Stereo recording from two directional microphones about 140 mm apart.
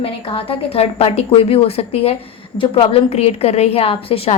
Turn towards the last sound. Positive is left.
turn(degrees=45)  # may be behind; listen again after turning